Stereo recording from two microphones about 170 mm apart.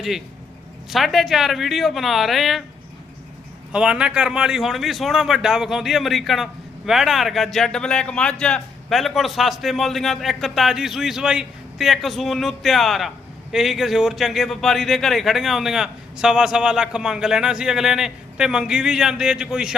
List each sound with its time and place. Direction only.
0.9 s a man's voice: centre (ahead or behind)
3.7 s a man's voice: 5° right (ahead or behind)